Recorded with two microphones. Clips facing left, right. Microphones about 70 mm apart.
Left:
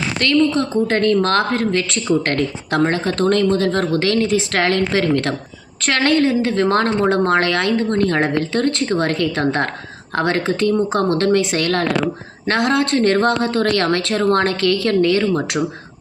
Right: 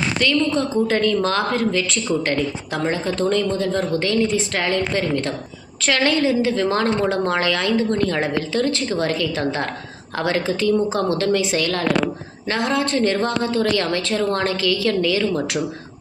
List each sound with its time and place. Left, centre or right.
0.2 s a woman's voice: left
5.8 s a woman's voice: left